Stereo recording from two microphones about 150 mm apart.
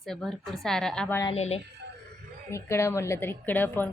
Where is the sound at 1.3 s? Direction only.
45° left (ahead or behind).